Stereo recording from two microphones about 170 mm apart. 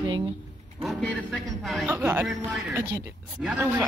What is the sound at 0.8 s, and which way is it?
Speech, 5° left (ahead or behind).